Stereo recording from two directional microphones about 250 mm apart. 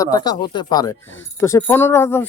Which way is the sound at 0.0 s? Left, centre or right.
Centre.